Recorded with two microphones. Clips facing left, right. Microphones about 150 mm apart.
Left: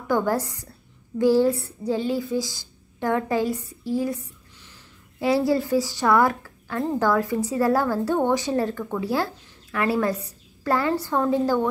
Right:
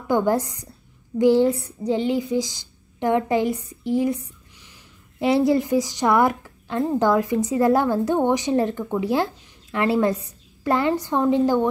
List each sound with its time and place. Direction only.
0.1 s a woman's voice: 20° right (ahead or behind)
5.2 s a woman's voice: 20° right (ahead or behind)